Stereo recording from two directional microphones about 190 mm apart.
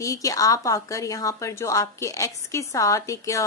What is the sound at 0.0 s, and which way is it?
A woman's voice, 20° left (ahead or behind).